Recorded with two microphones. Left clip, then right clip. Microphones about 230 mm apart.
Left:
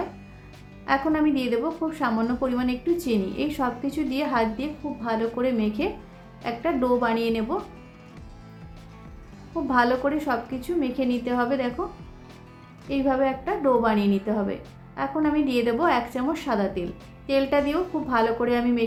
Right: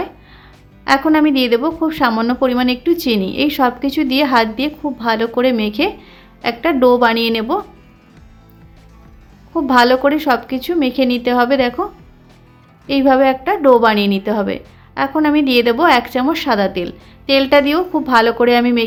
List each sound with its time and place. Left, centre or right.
0.9 s a woman's voice: right
9.6 s a woman's voice: right
12.9 s a woman's voice: right